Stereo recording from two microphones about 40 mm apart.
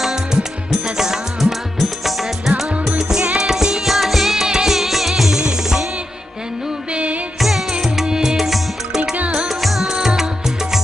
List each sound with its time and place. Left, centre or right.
0.0 s music: centre
3.0 s music: centre
6.9 s music: right
7.3 s music: centre